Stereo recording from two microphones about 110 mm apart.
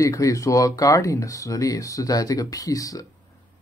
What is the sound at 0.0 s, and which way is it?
Speech, 30° left (ahead or behind).